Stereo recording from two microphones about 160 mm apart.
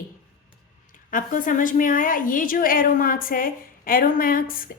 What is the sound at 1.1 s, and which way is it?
A woman's voice, 55° left (ahead or behind).